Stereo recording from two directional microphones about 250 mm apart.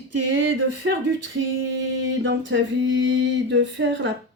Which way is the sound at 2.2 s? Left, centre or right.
Right.